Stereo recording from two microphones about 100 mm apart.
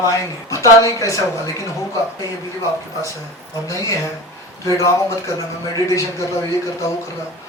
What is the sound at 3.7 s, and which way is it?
Speech, 30° left (ahead or behind).